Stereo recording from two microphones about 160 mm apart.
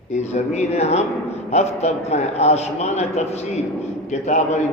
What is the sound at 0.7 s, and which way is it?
A man's voice, 40° left (ahead or behind).